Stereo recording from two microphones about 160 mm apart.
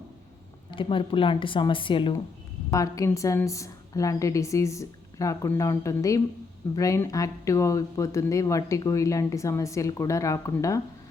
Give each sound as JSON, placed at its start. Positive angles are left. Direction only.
{"t": 0.7, "sound": "a woman's voice", "side_deg": 35}
{"t": 2.6, "sound": "speech", "side_deg": 20}